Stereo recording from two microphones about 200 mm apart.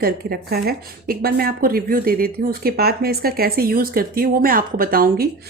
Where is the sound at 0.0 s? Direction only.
50° right (ahead or behind).